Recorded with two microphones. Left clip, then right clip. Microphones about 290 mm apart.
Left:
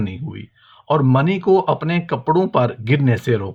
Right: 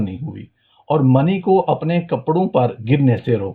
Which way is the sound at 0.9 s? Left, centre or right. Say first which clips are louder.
Right 1 dB; left.